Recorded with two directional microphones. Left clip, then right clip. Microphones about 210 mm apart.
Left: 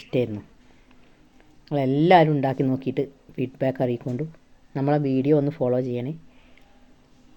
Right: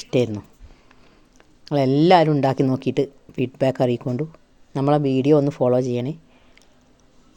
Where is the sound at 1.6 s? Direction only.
30° right (ahead or behind).